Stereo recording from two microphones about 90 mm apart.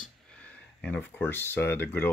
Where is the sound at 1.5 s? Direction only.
25° left (ahead or behind).